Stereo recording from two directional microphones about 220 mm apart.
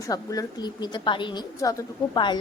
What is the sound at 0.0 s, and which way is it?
Speech, 15° left (ahead or behind).